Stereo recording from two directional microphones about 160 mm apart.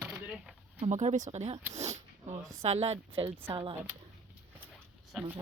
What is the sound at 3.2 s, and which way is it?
Speech, 15° right (ahead or behind).